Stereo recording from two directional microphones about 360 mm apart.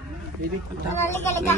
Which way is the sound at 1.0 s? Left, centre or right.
Centre.